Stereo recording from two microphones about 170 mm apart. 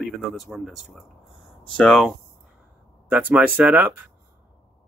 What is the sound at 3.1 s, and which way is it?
Speech, 10° right (ahead or behind).